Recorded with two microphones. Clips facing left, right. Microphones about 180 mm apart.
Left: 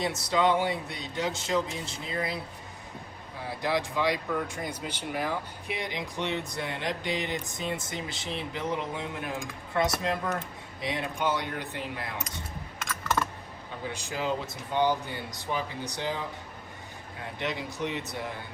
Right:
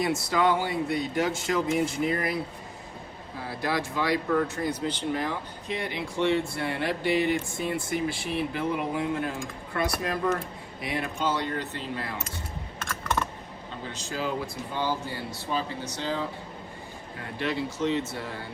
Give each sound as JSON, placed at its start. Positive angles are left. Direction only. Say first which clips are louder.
{"t": 0.0, "sound": "speech", "louder": "right 2 dB", "side_deg": 20}
{"t": 3.6, "sound": "speech", "louder": "left 1 dB", "side_deg": 20}
{"t": 12.8, "sound": "computer keyboard", "louder": "even", "side_deg": 5}
{"t": 13.8, "sound": "speech", "louder": "left 1 dB", "side_deg": 15}
{"t": 17.3, "sound": "speech", "louder": "right 4 dB", "side_deg": 15}